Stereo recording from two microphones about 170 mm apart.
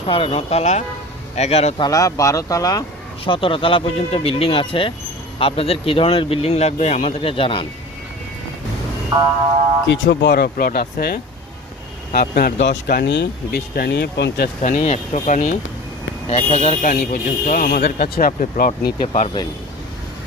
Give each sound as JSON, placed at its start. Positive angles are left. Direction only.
{"t": 0.0, "sound": "speech", "side_deg": 35}
{"t": 1.8, "sound": "speech", "side_deg": 20}
{"t": 3.2, "sound": "speech", "side_deg": 30}
{"t": 9.9, "sound": "speech", "side_deg": 90}
{"t": 14.6, "sound": "speech", "side_deg": 45}
{"t": 19.0, "sound": "speech", "side_deg": 40}